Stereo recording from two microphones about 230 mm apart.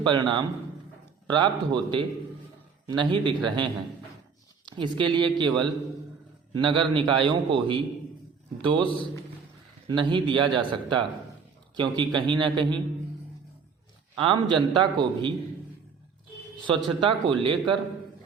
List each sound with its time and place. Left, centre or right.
0.0 s a man's voice: centre
8.9 s a man's voice: left
9.9 s a man's voice: right
14.2 s a man's voice: centre
16.6 s a man's voice: right